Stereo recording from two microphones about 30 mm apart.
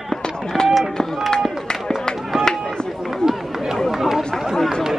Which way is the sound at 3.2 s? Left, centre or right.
Centre.